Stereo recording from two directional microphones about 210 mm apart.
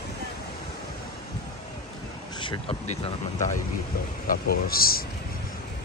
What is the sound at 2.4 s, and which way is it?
Speech, 30° left (ahead or behind).